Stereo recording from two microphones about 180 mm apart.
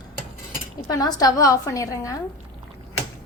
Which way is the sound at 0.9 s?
20° left (ahead or behind).